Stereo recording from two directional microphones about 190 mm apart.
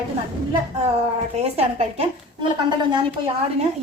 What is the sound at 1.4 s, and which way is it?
Speech, 30° right (ahead or behind).